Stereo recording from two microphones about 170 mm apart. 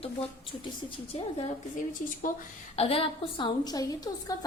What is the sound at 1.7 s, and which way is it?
Speech, 55° left (ahead or behind).